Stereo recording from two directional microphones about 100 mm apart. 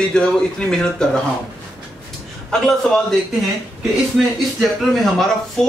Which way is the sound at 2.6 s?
5° left (ahead or behind).